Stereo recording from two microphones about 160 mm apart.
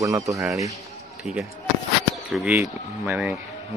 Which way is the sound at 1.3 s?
Centre (ahead or behind).